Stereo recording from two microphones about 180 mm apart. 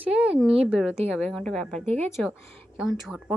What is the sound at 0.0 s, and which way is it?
A woman's voice, 5° right (ahead or behind).